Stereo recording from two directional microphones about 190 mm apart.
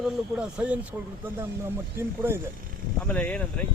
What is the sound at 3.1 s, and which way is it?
Speech, 5° left (ahead or behind).